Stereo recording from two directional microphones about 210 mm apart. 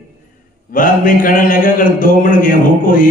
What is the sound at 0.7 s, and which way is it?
A man's voice, 40° left (ahead or behind).